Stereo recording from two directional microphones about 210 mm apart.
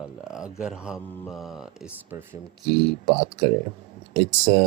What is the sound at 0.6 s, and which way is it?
Speech, 5° right (ahead or behind).